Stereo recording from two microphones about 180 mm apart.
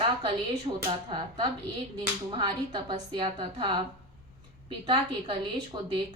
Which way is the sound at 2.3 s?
25° right (ahead or behind).